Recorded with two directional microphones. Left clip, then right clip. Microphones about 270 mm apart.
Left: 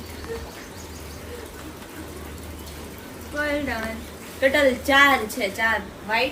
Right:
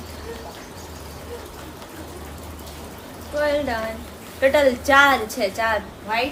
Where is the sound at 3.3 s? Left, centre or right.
Right.